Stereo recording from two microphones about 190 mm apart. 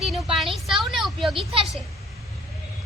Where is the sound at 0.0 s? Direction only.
Centre (ahead or behind).